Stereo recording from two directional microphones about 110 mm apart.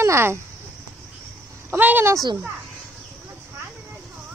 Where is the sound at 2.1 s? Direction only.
30° right (ahead or behind).